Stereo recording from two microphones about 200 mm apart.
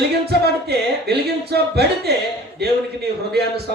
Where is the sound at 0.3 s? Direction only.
55° right (ahead or behind).